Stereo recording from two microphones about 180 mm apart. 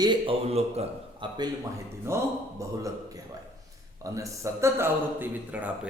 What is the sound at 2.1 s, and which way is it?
Speech, 15° right (ahead or behind).